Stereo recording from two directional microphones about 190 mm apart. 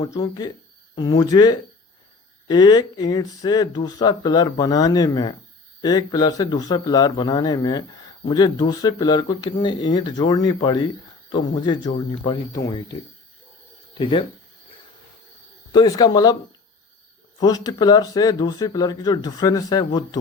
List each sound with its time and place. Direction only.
0.0 s speech: 20° left (ahead or behind)
14.0 s speech: 30° left (ahead or behind)
15.7 s speech: 20° left (ahead or behind)
17.4 s speech: 20° left (ahead or behind)